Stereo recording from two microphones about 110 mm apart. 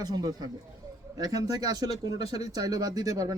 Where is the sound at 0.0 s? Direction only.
35° right (ahead or behind).